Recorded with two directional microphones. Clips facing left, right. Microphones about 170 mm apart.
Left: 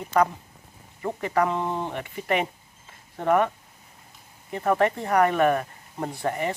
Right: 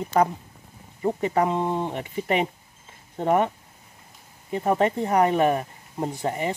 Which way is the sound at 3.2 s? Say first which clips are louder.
Even; 25° right (ahead or behind).